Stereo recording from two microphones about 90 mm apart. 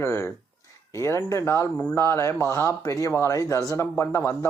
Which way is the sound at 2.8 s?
40° left (ahead or behind).